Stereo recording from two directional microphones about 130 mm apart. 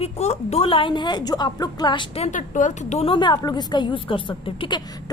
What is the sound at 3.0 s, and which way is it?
A woman's voice, 35° left (ahead or behind).